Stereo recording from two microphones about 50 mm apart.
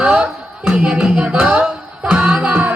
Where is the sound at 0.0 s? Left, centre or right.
Right.